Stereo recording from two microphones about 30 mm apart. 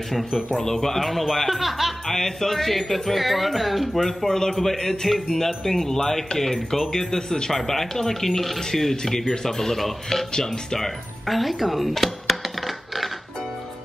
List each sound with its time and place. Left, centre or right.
0.6 s music: centre
2.0 s music: centre
4.3 s speech: centre
7.5 s speech: centre
11.2 s music: centre